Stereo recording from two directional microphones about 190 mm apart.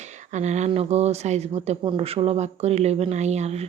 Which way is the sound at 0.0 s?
40° right (ahead or behind).